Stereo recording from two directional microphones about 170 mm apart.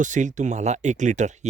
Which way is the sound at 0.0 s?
45° right (ahead or behind).